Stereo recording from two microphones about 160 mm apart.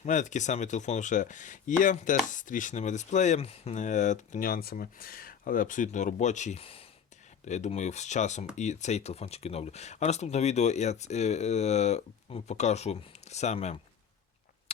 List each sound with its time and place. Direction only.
0.0 s speech: 50° left (ahead or behind)
7.4 s speech: 45° left (ahead or behind)